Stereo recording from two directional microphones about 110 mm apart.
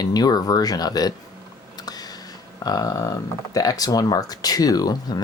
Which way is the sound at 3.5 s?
35° left (ahead or behind).